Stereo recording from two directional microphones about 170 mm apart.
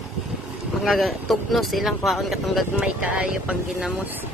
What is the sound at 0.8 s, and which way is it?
Speech, centre (ahead or behind).